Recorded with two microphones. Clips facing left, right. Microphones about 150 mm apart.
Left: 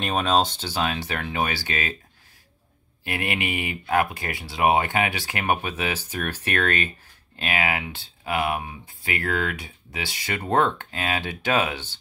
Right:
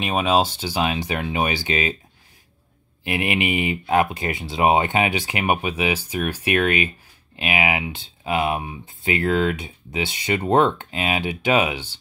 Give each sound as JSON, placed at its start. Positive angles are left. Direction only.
{"t": 0.0, "sound": "speech", "side_deg": -5}
{"t": 3.0, "sound": "speech", "side_deg": -15}